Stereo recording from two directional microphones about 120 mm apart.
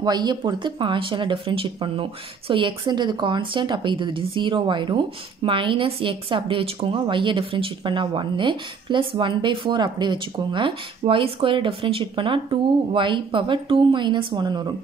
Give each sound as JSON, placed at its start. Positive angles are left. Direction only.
{"t": 0.0, "sound": "speech", "side_deg": -35}